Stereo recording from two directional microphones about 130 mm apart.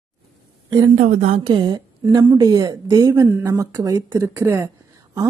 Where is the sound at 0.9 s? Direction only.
75° right (ahead or behind).